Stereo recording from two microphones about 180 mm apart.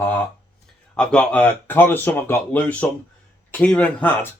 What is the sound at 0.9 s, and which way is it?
Speech, 5° left (ahead or behind).